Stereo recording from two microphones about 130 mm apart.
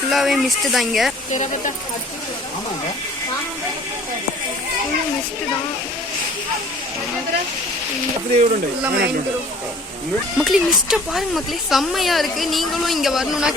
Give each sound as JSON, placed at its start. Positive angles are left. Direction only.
{"t": 0.1, "sound": "speech", "side_deg": 0}
{"t": 1.3, "sound": "speech", "side_deg": 65}
{"t": 8.3, "sound": "speech", "side_deg": -55}
{"t": 10.3, "sound": "speech", "side_deg": -5}